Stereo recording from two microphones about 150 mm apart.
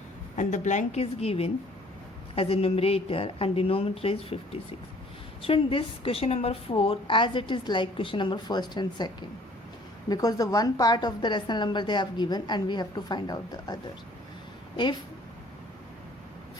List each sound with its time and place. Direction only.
0.3 s a woman's voice: 55° left (ahead or behind); by 4.4 s 40° left (ahead or behind)
5.4 s a woman's voice: 35° left (ahead or behind)